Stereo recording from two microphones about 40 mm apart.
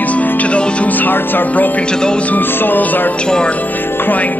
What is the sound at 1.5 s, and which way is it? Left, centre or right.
Music, left.